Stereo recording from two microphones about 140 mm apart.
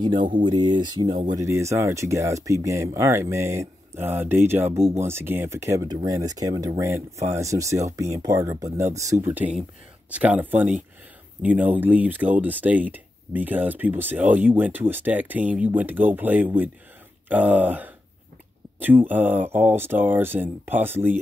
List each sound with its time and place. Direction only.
0.5 s speech: 30° right (ahead or behind)
1.3 s speech: 20° right (ahead or behind)